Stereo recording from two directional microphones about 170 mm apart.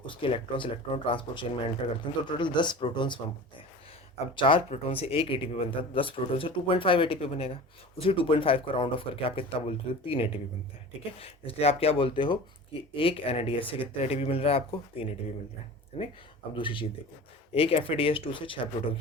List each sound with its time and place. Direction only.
0.1 s speech: 30° left (ahead or behind)
4.4 s speech: 30° left (ahead or behind)
16.6 s speech: 30° left (ahead or behind)